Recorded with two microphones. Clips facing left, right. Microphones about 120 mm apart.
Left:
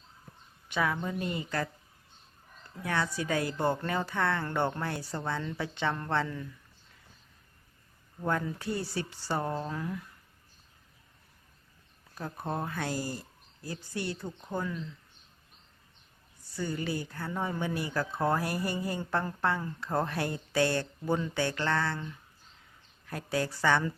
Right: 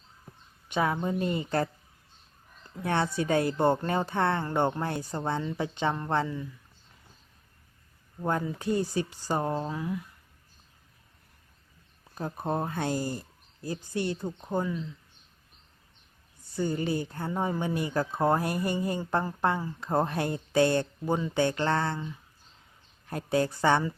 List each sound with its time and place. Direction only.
0.7 s speech: 25° right (ahead or behind)
2.8 s speech: 25° right (ahead or behind)
6.2 s speech: centre (ahead or behind)
8.2 s speech: 20° right (ahead or behind)
12.2 s speech: 25° right (ahead or behind)
16.6 s speech: 25° right (ahead or behind)